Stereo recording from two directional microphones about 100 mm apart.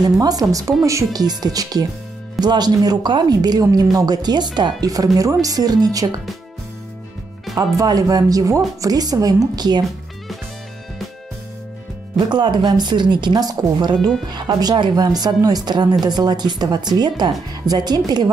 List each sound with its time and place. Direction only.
0.0 s speech: 40° right (ahead or behind)
7.5 s speech: 40° right (ahead or behind)
12.2 s speech: 50° right (ahead or behind)